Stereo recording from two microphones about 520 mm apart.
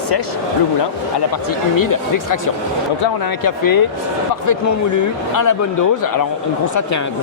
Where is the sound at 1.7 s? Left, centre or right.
Left.